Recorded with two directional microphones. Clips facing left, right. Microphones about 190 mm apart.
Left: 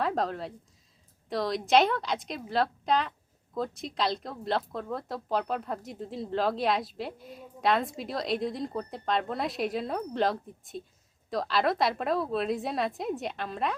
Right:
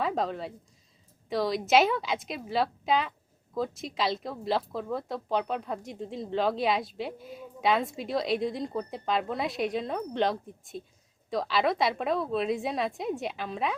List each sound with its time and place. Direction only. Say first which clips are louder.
0.0 s a woman's voice: even; centre (ahead or behind)